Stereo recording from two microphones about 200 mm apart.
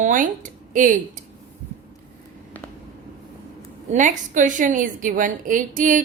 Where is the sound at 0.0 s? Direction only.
40° right (ahead or behind).